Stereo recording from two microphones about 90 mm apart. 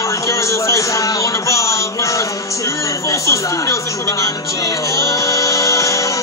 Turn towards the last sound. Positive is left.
turn(degrees=35)  # may be behind; listen again after turning